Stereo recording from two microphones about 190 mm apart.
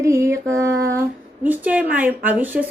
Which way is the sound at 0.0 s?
15° right (ahead or behind).